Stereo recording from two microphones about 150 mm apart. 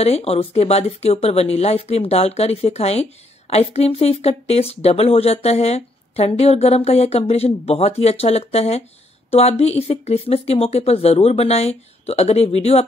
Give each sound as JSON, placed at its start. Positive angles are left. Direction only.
{"t": 0.0, "sound": "speech", "side_deg": 45}